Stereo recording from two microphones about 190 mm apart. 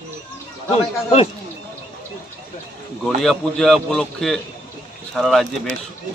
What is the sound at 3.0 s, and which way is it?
A man's voice, centre (ahead or behind).